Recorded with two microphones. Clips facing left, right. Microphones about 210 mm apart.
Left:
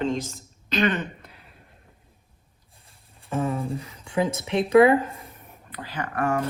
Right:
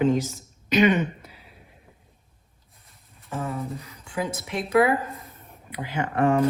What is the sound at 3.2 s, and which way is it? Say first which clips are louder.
Speech: left 4 dB; 30° left (ahead or behind).